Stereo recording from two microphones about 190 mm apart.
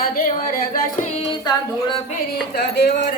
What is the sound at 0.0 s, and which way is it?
Speech, 50° left (ahead or behind).